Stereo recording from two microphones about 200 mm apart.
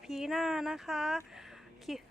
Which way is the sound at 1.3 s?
Centre (ahead or behind).